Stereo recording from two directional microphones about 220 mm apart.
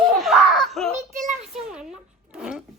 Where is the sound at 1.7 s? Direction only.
5° right (ahead or behind).